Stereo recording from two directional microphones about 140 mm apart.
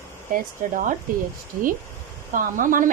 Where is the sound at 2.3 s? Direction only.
70° right (ahead or behind).